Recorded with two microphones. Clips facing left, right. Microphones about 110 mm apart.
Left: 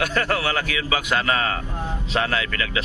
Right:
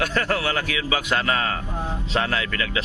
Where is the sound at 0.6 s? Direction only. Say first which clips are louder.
Even; 25° right (ahead or behind).